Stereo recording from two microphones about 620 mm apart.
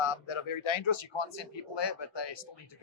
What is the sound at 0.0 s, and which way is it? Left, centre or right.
A man's voice, left.